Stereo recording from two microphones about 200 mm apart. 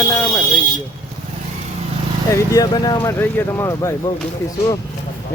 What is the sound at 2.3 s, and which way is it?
Speech, 15° left (ahead or behind).